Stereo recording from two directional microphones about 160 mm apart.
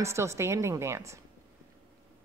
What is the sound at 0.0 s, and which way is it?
A woman's voice, 15° right (ahead or behind).